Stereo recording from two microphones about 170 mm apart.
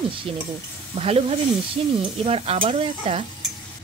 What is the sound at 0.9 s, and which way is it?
Speech, 35° right (ahead or behind).